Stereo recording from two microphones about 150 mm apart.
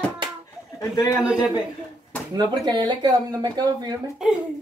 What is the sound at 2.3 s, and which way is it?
Speech, 30° right (ahead or behind).